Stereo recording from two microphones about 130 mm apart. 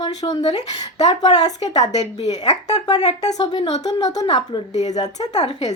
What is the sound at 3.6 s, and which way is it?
Speech, 50° left (ahead or behind).